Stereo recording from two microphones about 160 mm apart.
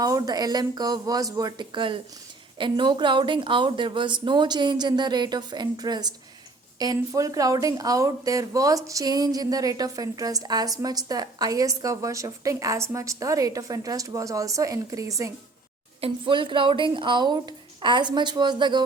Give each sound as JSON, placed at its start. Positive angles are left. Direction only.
{"t": 0.0, "sound": "speech", "side_deg": -25}
{"t": 16.0, "sound": "speech", "side_deg": -35}